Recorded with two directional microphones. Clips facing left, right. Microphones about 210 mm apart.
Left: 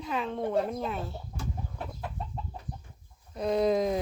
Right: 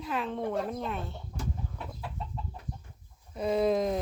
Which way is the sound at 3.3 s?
5° right (ahead or behind).